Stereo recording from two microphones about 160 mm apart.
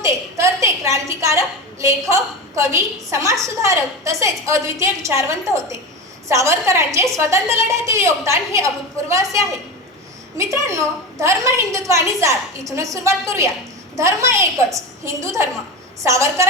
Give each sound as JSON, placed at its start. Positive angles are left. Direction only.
{"t": 0.0, "sound": "a woman's voice", "side_deg": -20}